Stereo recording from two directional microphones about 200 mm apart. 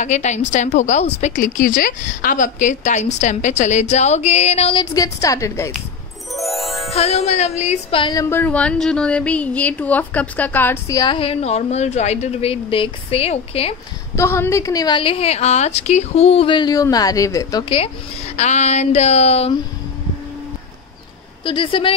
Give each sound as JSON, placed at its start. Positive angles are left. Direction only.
{"t": 0.0, "sound": "a woman's voice", "side_deg": 35}
{"t": 4.9, "sound": "a woman's voice", "side_deg": 15}
{"t": 6.3, "sound": "music", "side_deg": 0}
{"t": 6.9, "sound": "speech", "side_deg": 30}
{"t": 14.1, "sound": "speech", "side_deg": 15}
{"t": 21.5, "sound": "speech", "side_deg": 25}